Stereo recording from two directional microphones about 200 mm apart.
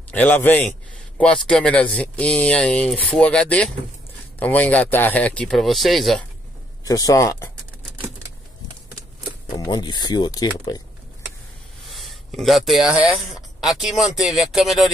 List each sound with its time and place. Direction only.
0.1 s a man's voice: 5° left (ahead or behind)
6.8 s speech: 15° left (ahead or behind)
9.6 s speech: 20° left (ahead or behind)
11.9 s speech: centre (ahead or behind)